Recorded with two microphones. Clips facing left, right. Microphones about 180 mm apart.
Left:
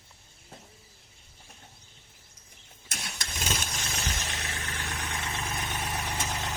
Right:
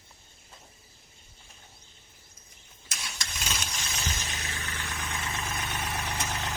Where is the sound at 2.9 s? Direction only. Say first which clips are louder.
Left 1 dB; 50° left (ahead or behind).